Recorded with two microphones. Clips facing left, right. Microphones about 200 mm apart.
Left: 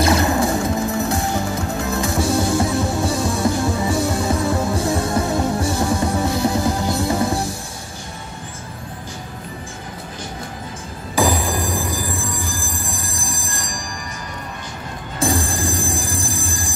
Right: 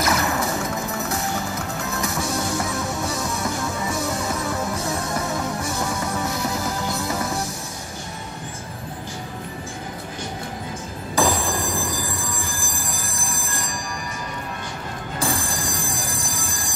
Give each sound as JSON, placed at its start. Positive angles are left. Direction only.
{"t": 0.0, "sound": "music", "side_deg": 30}
{"t": 11.1, "sound": "music", "side_deg": 5}
{"t": 11.4, "sound": "music", "side_deg": 20}
{"t": 12.9, "sound": "train wheels squealing", "side_deg": 30}
{"t": 15.1, "sound": "music", "side_deg": 25}